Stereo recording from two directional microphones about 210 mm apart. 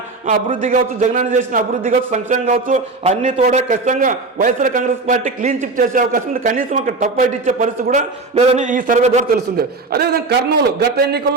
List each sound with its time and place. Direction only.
0.3 s a man's voice: 35° right (ahead or behind)